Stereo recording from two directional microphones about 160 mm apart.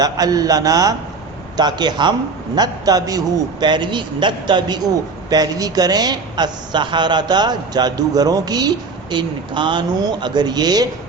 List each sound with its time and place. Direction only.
0.0 s a woman's voice: 25° right (ahead or behind)